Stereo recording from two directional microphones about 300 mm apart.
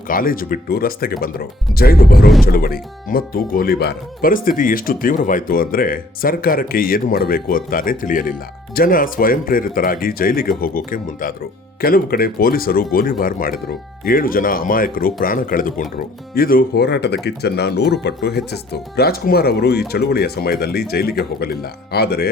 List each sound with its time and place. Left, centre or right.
0.1 s speech: left